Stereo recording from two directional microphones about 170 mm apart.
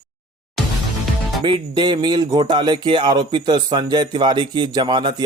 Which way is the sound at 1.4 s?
30° right (ahead or behind).